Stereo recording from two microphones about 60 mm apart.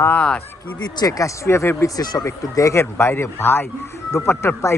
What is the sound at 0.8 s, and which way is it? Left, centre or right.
Speech, left.